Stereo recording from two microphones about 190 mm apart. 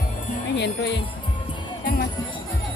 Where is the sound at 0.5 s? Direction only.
65° left (ahead or behind).